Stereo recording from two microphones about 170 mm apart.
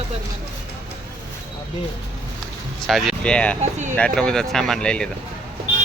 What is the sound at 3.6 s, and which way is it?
Speech, 45° right (ahead or behind).